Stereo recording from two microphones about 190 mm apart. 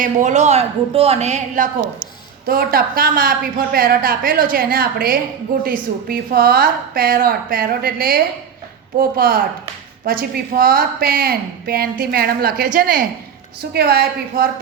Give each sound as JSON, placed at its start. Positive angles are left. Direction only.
{"t": 0.0, "sound": "a woman's voice", "side_deg": -40}
{"t": 2.5, "sound": "a woman's voice", "side_deg": -50}